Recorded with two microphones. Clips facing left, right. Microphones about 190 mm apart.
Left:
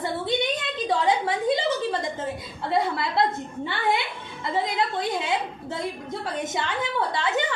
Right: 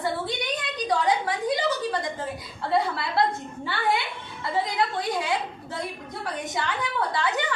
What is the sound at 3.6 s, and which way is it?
A woman's voice, 20° left (ahead or behind).